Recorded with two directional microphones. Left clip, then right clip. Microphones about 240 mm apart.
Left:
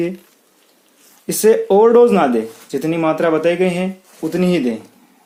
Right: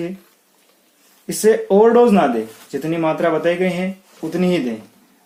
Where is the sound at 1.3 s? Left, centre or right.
Left.